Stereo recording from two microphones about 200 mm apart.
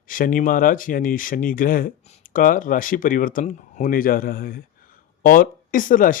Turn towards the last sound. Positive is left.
turn(degrees=45)  # may be behind; listen again after turning